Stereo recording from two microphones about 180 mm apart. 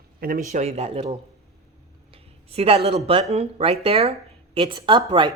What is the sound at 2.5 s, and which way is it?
Speech, 35° right (ahead or behind).